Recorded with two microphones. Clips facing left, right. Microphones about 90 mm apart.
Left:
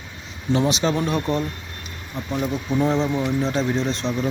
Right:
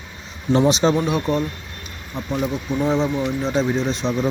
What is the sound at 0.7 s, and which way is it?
Speech, 25° right (ahead or behind).